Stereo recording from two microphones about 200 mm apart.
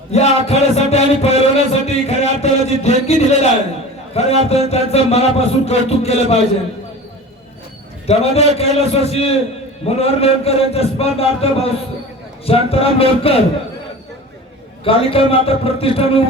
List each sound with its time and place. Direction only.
0.1 s music: 30° left (ahead or behind)
2.4 s a man's voice: 30° left (ahead or behind)
8.0 s a man's voice: 30° left (ahead or behind)
14.8 s a man's voice: 30° left (ahead or behind)